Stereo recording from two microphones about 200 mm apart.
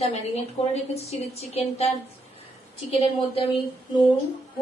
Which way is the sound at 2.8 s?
30° left (ahead or behind).